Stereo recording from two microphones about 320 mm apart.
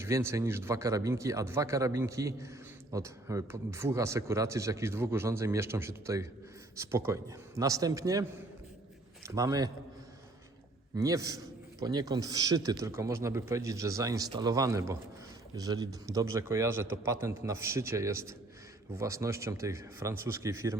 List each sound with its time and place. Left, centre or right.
0.0 s speech: centre
10.9 s speech: centre